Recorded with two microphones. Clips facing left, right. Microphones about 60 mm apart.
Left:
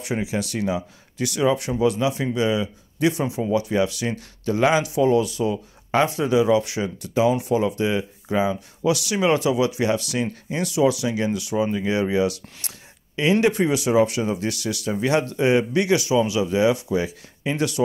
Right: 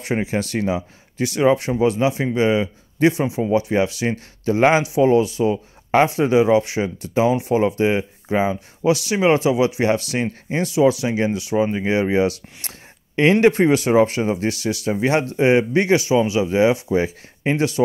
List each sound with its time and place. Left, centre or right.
0.0 s speech: right